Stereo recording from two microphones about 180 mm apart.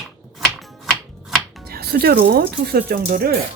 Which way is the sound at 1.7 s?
60° right (ahead or behind).